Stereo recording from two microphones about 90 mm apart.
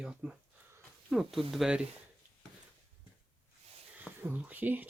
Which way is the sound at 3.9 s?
20° right (ahead or behind).